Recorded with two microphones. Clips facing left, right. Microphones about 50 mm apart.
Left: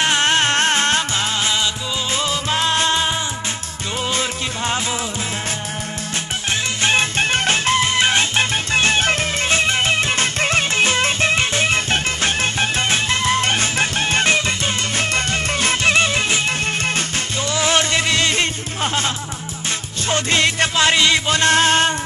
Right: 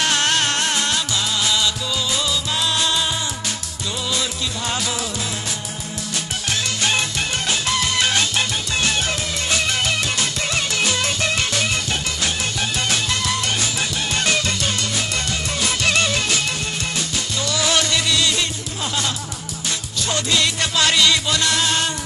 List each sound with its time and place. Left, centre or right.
0.0 s music: left
4.1 s music: left
6.8 s music: left
17.5 s music: left